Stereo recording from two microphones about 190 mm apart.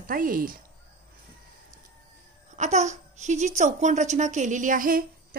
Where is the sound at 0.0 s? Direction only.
45° right (ahead or behind).